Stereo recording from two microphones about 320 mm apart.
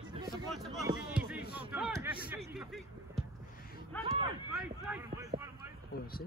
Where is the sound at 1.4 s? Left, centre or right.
Left.